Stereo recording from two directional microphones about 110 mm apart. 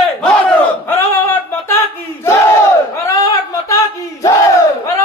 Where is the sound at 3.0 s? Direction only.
30° left (ahead or behind).